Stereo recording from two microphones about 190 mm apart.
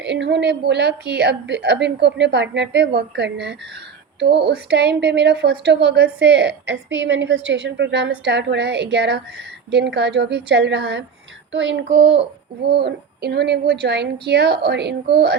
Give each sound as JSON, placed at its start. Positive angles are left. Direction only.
{"t": 0.0, "sound": "a woman's voice", "side_deg": -65}
{"t": 11.5, "sound": "child singing", "side_deg": -75}
{"t": 12.6, "sound": "a woman's voice", "side_deg": -60}